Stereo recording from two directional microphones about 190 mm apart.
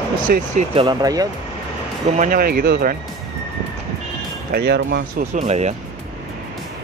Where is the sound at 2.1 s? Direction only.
45° right (ahead or behind).